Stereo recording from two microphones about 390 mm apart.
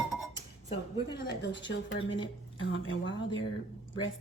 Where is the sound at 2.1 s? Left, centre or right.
Left.